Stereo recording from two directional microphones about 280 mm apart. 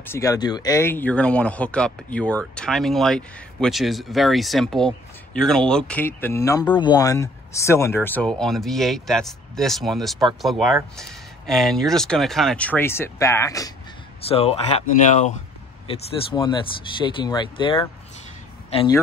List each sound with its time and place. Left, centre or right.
0.0 s speech: centre